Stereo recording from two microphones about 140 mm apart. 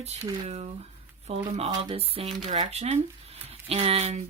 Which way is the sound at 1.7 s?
30° right (ahead or behind).